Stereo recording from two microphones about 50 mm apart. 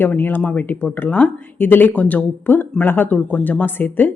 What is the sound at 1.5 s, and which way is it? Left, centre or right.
A woman's voice, left.